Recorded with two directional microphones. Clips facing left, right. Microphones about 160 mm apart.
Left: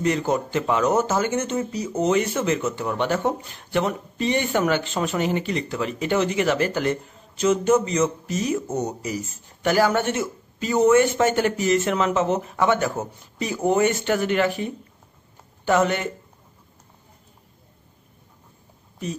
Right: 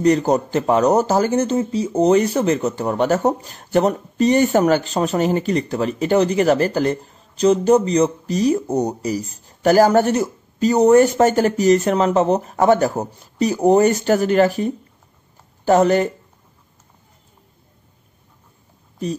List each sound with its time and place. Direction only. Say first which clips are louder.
0.0 s speech: right 6 dB; 40° right (ahead or behind)